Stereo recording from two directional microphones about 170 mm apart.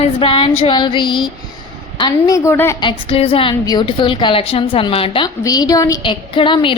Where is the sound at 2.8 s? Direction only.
30° left (ahead or behind).